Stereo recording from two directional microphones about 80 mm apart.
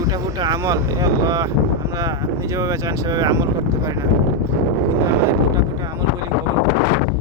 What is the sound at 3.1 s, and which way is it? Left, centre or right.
Speech, right.